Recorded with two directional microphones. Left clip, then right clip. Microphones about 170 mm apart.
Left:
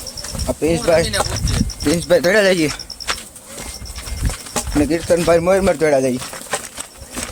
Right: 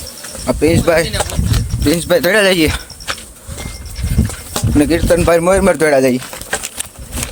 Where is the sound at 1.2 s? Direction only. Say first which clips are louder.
Right 1 dB; 25° right (ahead or behind).